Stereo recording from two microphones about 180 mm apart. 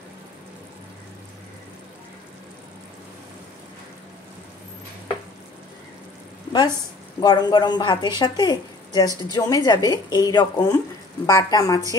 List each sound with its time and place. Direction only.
7.2 s a woman's voice: 25° left (ahead or behind)